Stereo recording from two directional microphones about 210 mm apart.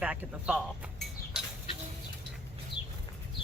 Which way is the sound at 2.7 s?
25° left (ahead or behind).